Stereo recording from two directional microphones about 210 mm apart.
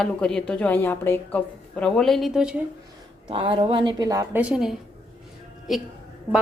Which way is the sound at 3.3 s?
25° right (ahead or behind).